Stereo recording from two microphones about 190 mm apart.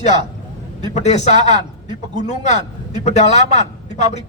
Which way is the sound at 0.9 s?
35° left (ahead or behind).